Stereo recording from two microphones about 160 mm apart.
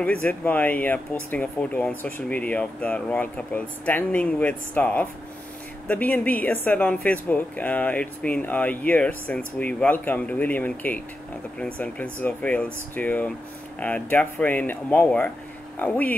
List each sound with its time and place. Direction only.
0.0 s speech: 10° left (ahead or behind)